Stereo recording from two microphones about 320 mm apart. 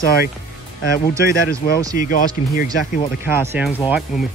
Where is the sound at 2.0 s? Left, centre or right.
Left.